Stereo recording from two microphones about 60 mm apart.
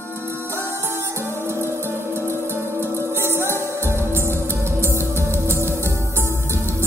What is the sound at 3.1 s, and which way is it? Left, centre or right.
Music, right.